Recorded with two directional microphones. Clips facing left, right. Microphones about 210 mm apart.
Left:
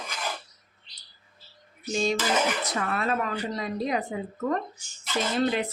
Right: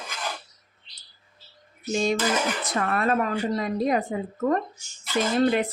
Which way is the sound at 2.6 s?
50° right (ahead or behind).